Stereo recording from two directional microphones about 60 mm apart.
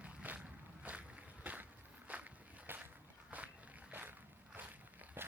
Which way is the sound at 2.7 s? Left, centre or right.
Right.